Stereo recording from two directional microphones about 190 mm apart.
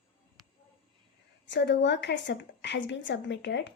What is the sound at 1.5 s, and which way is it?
A woman's voice, 65° left (ahead or behind).